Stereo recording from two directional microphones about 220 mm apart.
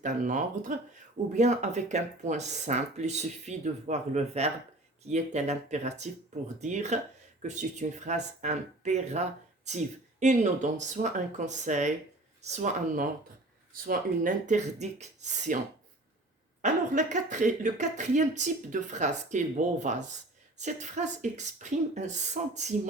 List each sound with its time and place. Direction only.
0.0 s speech: 35° right (ahead or behind)
16.6 s speech: 35° right (ahead or behind)